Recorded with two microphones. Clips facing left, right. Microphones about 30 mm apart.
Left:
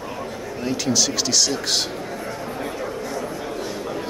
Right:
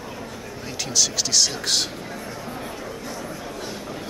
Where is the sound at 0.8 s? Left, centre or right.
Centre.